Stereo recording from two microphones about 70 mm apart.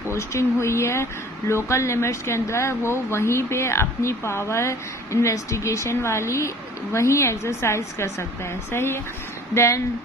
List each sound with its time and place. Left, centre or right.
0.1 s speech: left